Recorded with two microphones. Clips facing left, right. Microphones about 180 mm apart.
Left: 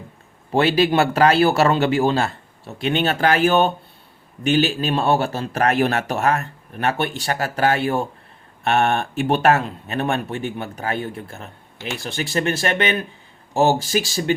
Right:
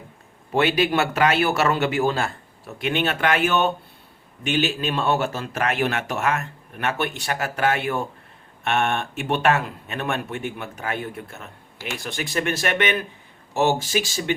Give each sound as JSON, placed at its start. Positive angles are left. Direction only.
{"t": 0.5, "sound": "speech", "side_deg": 30}